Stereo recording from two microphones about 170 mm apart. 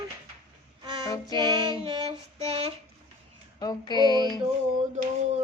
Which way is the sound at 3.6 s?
25° left (ahead or behind).